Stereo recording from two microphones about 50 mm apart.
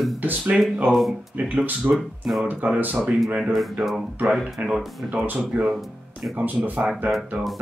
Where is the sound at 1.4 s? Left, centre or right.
Right.